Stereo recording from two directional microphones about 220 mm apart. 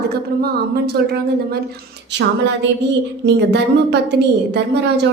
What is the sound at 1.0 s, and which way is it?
Speech, 45° right (ahead or behind).